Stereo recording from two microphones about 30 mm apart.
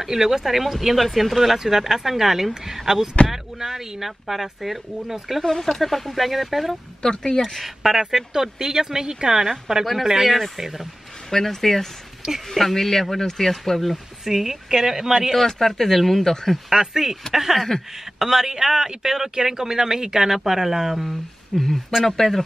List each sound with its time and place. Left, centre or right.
0.0 s speech: centre
5.4 s speech: centre
5.8 s speech: centre
7.0 s speech: left
7.6 s speech: centre
11.2 s speech: centre
12.2 s speech: centre
12.5 s speech: centre
14.2 s speech: centre
15.3 s speech: centre
16.7 s speech: centre
17.6 s speech: centre
18.2 s speech: centre
21.5 s speech: centre